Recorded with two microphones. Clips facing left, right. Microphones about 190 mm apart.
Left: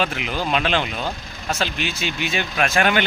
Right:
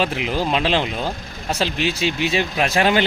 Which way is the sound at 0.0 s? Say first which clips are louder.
Right 3 dB; 30° right (ahead or behind).